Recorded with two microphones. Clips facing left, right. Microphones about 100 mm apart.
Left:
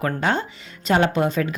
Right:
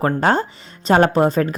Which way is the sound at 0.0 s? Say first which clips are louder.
Right 5 dB; 40° right (ahead or behind).